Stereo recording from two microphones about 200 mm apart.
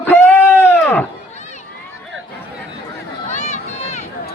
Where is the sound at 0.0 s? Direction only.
10° left (ahead or behind).